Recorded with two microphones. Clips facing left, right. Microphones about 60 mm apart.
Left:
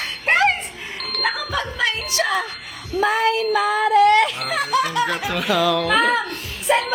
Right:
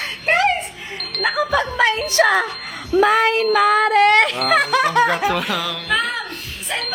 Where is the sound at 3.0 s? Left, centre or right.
Right.